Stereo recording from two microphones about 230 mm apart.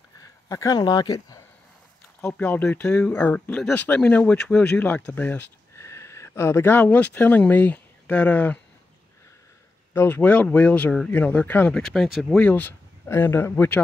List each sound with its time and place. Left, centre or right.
0.5 s speech: centre
9.9 s speech: centre